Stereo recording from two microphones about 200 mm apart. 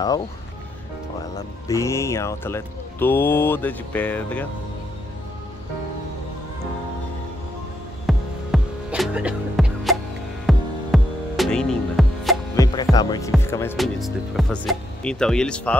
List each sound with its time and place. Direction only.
1.7 s speech: 15° left (ahead or behind)
8.1 s music: centre (ahead or behind)
12.6 s music: 15° left (ahead or behind)
13.4 s speech: 10° left (ahead or behind)
13.7 s speech: centre (ahead or behind)